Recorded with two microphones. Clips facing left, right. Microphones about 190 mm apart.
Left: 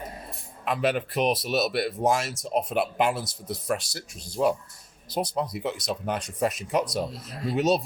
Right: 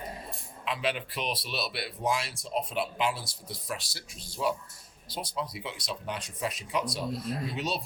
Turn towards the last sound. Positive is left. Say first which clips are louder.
# left 9 dB
turn(degrees=45)  # may be behind; listen again after turning